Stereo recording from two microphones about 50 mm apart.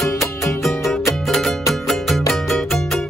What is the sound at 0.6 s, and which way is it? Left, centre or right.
Music, centre.